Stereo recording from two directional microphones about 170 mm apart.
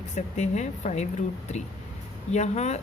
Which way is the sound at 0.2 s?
45° left (ahead or behind).